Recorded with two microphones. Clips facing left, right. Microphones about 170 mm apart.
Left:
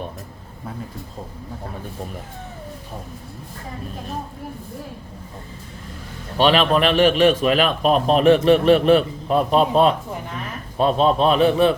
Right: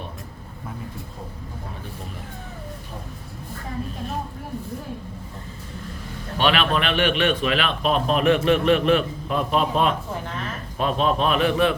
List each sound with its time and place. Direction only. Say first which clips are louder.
6.3 s a man's voice: left 5 dB; 35° left (ahead or behind)